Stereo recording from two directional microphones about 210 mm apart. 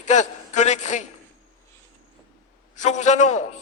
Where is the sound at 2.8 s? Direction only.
35° left (ahead or behind).